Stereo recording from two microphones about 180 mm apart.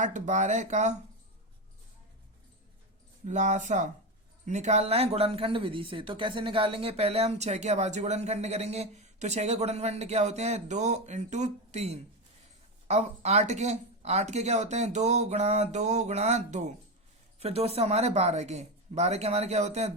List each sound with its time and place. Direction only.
0.0 s speech: 45° right (ahead or behind)
3.2 s speech: 40° right (ahead or behind)